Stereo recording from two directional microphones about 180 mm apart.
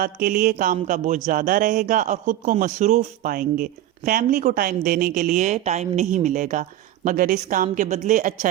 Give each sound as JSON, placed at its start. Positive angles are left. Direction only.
{"t": 0.0, "sound": "a man's voice", "side_deg": -55}